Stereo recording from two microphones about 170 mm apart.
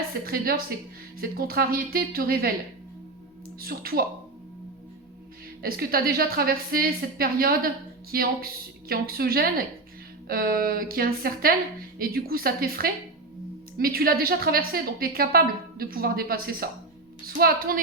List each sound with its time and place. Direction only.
0.3 s a woman's voice: 60° right (ahead or behind)
3.6 s a woman's voice: 60° right (ahead or behind)
5.6 s a woman's voice: 60° right (ahead or behind)